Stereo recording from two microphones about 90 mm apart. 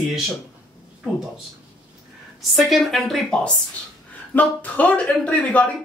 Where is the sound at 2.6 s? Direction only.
Centre (ahead or behind).